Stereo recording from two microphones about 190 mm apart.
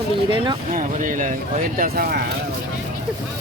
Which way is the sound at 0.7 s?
45° right (ahead or behind).